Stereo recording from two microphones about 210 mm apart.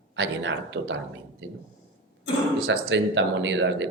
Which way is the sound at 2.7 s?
60° right (ahead or behind).